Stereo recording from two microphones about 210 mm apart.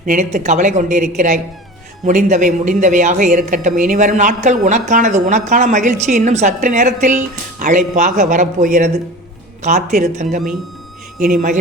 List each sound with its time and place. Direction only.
0.0 s speech: 40° right (ahead or behind)